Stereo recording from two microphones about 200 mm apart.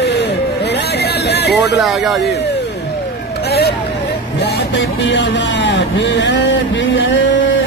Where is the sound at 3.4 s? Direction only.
55° left (ahead or behind).